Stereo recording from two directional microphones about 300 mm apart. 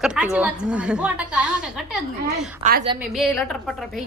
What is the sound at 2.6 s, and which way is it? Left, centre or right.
Speech, right.